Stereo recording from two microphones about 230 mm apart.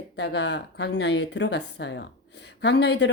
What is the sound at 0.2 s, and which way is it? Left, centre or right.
Speech, left.